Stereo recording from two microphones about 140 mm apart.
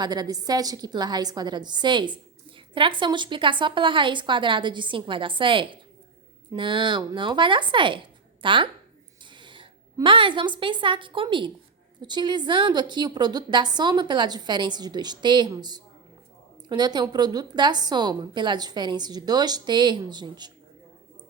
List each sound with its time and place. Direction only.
0.0 s a woman's voice: 30° right (ahead or behind)